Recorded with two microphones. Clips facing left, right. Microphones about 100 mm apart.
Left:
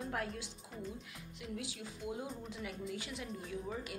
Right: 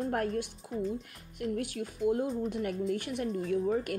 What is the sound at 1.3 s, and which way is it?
A woman's voice, 55° right (ahead or behind).